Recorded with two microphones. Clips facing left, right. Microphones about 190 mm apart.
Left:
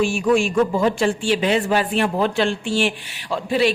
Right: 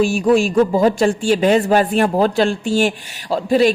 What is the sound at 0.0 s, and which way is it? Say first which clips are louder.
Speech: right 4 dB; 40° right (ahead or behind).